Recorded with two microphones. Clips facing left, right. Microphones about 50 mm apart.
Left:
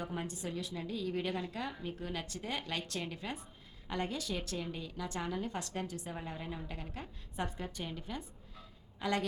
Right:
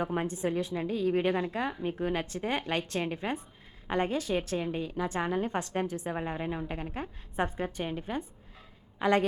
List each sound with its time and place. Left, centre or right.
0.0 s a woman's voice: right